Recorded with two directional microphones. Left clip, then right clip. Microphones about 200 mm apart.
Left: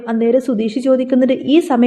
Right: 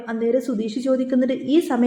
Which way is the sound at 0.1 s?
30° left (ahead or behind).